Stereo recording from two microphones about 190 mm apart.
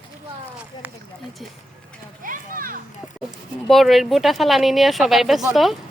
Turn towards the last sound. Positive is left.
turn(degrees=0)  # may be behind; listen again after turning